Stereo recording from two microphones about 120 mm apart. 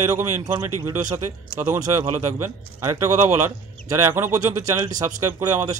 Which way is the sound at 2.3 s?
25° right (ahead or behind).